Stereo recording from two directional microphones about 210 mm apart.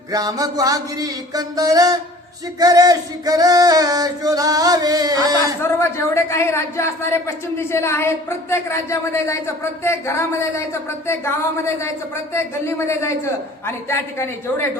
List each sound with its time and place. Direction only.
0.1 s male singing: 15° right (ahead or behind)
5.8 s a man's voice: 10° left (ahead or behind)